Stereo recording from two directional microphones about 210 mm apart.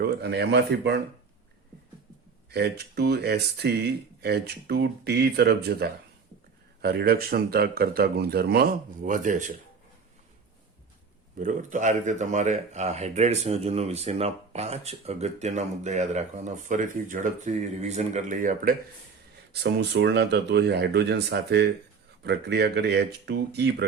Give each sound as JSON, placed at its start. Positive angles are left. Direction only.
{"t": 0.0, "sound": "speech", "side_deg": -50}
{"t": 2.5, "sound": "speech", "side_deg": -50}
{"t": 11.3, "sound": "speech", "side_deg": -35}
{"t": 19.6, "sound": "speech", "side_deg": -55}